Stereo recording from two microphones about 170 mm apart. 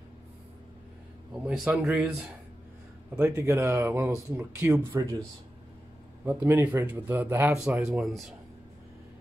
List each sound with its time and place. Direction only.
1.4 s speech: 5° right (ahead or behind)
3.2 s speech: 15° right (ahead or behind)
6.2 s speech: 15° right (ahead or behind)